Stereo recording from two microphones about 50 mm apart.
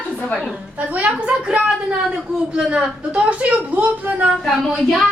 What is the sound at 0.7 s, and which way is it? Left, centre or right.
A woman's voice, right.